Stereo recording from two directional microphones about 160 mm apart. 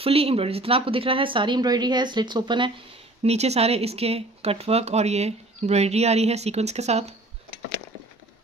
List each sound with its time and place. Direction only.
0.0 s speech: 35° right (ahead or behind)
3.2 s speech: 40° right (ahead or behind)